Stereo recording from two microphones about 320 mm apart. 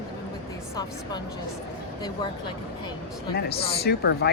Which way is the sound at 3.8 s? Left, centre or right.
Left.